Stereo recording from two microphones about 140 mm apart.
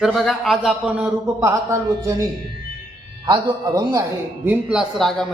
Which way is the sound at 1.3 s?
20° right (ahead or behind).